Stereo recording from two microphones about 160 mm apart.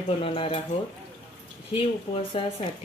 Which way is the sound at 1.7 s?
35° left (ahead or behind).